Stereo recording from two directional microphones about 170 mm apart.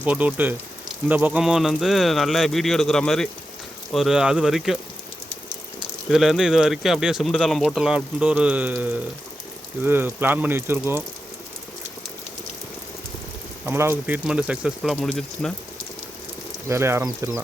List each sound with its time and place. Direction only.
0.0 s speech: 10° right (ahead or behind)
6.1 s speech: centre (ahead or behind)
13.7 s speech: 15° right (ahead or behind); by 15.5 s 5° left (ahead or behind)
16.6 s speech: 15° right (ahead or behind)